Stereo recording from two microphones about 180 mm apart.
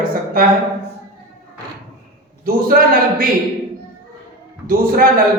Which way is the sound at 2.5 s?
55° right (ahead or behind).